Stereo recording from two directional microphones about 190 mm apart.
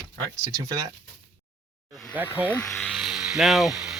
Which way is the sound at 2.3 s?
10° left (ahead or behind).